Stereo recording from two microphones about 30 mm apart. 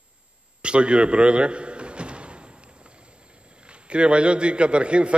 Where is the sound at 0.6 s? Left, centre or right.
Right.